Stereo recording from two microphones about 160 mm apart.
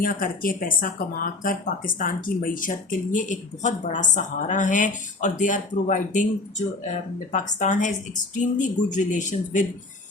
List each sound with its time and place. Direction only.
0.0 s speech: 60° left (ahead or behind)
7.3 s a woman's voice: 50° left (ahead or behind)